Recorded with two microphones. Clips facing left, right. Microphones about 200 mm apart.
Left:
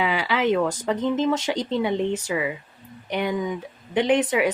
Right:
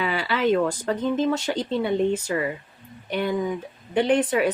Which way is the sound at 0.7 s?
15° left (ahead or behind).